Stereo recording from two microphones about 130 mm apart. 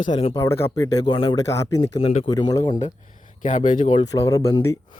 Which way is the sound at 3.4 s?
75° left (ahead or behind).